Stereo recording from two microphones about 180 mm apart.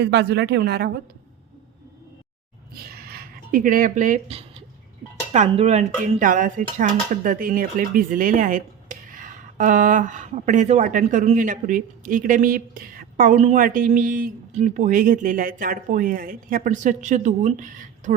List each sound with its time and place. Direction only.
0.0 s speech: 65° right (ahead or behind)
2.7 s a sound: 55° right (ahead or behind)
5.5 s speech: 35° right (ahead or behind)